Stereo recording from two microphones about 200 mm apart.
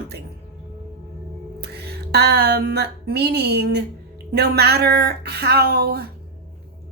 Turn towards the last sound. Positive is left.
turn(degrees=-50)  # may be behind; listen again after turning